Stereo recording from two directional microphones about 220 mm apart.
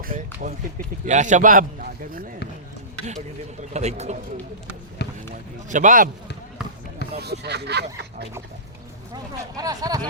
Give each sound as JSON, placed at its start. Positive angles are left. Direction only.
{"t": 0.0, "sound": "a man's voice", "side_deg": -40}
{"t": 3.6, "sound": "a man's voice", "side_deg": -30}
{"t": 5.0, "sound": "run", "side_deg": 50}
{"t": 5.6, "sound": "a man's voice", "side_deg": -35}
{"t": 7.1, "sound": "speech", "side_deg": -45}
{"t": 9.1, "sound": "speech", "side_deg": -15}